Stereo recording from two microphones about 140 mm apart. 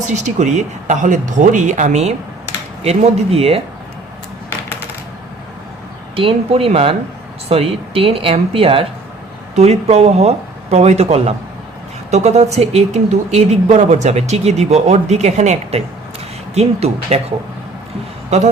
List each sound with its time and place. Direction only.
0.0 s speech: 60° right (ahead or behind)
6.1 s speech: 40° right (ahead or behind)
18.3 s speech: 55° right (ahead or behind)